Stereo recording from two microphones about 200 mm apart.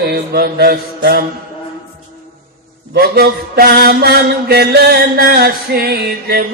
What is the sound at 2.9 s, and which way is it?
Mantra, 50° right (ahead or behind).